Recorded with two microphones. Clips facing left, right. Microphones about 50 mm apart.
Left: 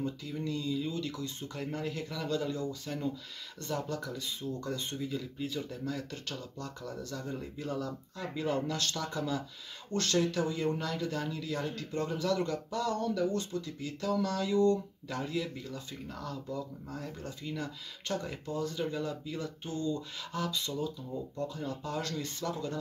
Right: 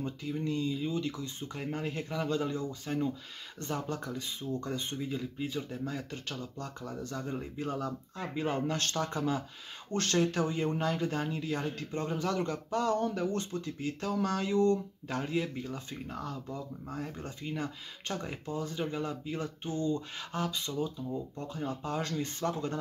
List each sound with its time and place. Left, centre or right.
0.0 s speech: right